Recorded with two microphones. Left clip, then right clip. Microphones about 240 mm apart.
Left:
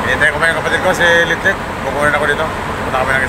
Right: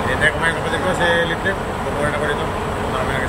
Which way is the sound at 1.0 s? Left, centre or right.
Centre.